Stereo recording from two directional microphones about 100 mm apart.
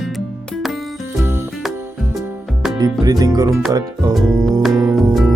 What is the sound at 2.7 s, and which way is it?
Music, 40° right (ahead or behind).